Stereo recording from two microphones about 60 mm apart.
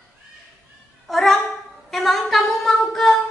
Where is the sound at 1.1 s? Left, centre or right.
Centre.